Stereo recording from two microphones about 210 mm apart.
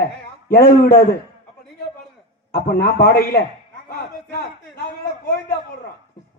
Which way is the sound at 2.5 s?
45° left (ahead or behind).